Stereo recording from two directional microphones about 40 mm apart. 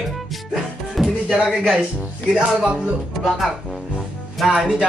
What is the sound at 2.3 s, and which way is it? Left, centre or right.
Speech, right.